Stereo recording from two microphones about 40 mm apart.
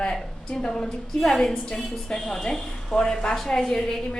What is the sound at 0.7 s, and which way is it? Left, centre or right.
Speech, centre.